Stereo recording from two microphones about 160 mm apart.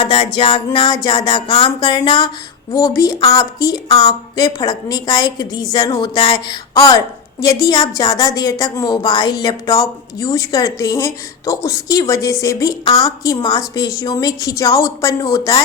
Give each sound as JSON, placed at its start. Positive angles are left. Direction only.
{"t": 0.0, "sound": "speech", "side_deg": 30}
{"t": 2.7, "sound": "speech", "side_deg": 20}